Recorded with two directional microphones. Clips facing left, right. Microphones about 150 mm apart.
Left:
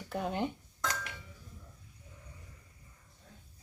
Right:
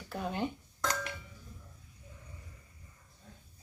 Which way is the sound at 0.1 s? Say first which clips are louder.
Left 1 dB; 15° left (ahead or behind).